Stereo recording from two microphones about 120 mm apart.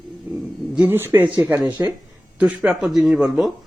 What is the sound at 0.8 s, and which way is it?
Speech, 15° right (ahead or behind).